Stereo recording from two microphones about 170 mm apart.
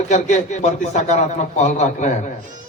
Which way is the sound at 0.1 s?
45° left (ahead or behind).